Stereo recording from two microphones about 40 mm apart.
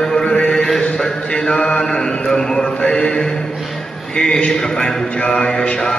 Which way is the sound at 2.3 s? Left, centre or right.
Centre.